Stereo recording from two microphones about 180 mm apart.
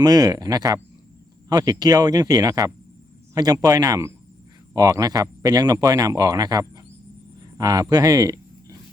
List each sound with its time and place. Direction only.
0.0 s a man's voice: 20° right (ahead or behind)